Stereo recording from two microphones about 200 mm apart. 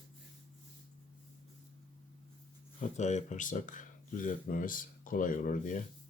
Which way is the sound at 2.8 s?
35° left (ahead or behind).